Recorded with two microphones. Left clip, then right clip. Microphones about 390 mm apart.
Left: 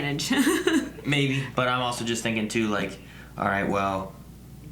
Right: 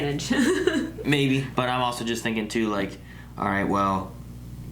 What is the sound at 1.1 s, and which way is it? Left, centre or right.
Speech, left.